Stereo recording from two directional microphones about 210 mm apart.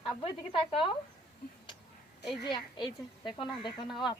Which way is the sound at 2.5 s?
20° left (ahead or behind).